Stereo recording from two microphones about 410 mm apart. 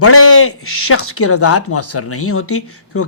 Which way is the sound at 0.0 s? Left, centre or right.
Left.